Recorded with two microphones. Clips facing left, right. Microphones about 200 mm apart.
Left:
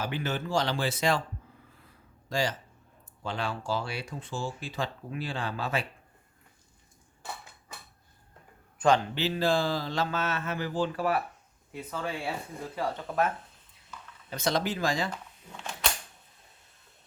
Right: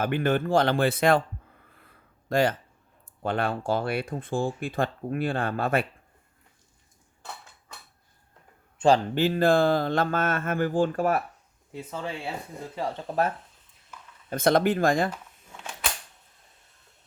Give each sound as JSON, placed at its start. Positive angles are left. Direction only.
{"t": 0.0, "sound": "speech", "side_deg": -55}
{"t": 1.7, "sound": "a sound", "side_deg": -55}
{"t": 3.2, "sound": "speech", "side_deg": -55}
{"t": 8.8, "sound": "a man's voice", "side_deg": -25}
{"t": 9.1, "sound": "speech", "side_deg": -50}
{"t": 11.7, "sound": "speech", "side_deg": -25}
{"t": 14.3, "sound": "speech", "side_deg": -55}
{"t": 15.1, "sound": "a sound", "side_deg": -5}